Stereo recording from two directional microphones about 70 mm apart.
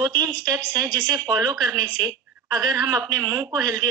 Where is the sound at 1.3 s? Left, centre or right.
Right.